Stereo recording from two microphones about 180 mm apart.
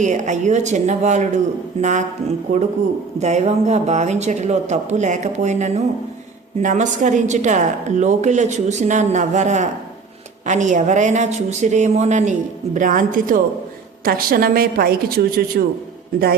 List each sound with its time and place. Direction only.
0.0 s a woman's voice: 40° right (ahead or behind)